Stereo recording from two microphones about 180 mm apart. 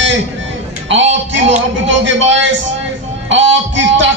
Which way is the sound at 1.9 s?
90° right.